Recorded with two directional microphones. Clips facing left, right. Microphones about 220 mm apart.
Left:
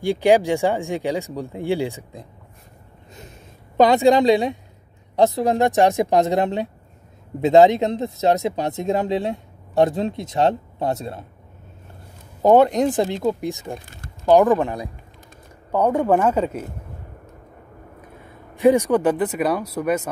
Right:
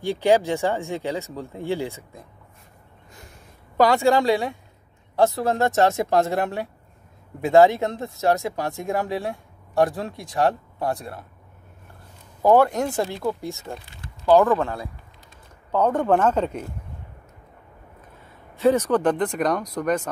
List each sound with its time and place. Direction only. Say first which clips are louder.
0.0 s speech: left 3 dB; 15° left (ahead or behind)
3.2 s a sound: left 5 dB; 20° left (ahead or behind)
5.1 s speech: left 3 dB; 20° left (ahead or behind)
12.4 s speech: left 3 dB; 20° left (ahead or behind)
13.7 s a sound: left 3 dB; 45° left (ahead or behind)
14.3 s speech: left 2 dB; 15° left (ahead or behind)
18.6 s speech: left 3 dB; 15° left (ahead or behind)